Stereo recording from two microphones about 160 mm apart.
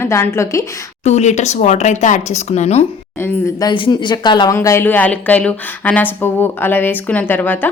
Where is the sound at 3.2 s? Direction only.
25° left (ahead or behind).